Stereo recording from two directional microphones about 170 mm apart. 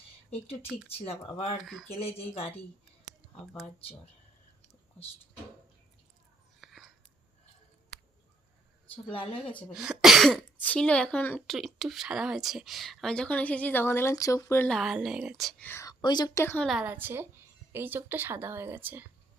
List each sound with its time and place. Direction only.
0.3 s speech: 35° left (ahead or behind)
1.5 s speech: centre (ahead or behind)
2.0 s speech: 35° left (ahead or behind)
6.6 s whispering: centre (ahead or behind)
9.7 s speech: 5° right (ahead or behind); by 14.7 s 15° left (ahead or behind)
14.7 s speech: centre (ahead or behind)
15.6 s a woman's voice: 15° left (ahead or behind)
16.6 s speech: 5° right (ahead or behind)